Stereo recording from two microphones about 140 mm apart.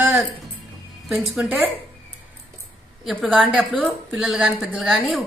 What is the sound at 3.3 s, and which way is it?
A woman's voice, 10° right (ahead or behind).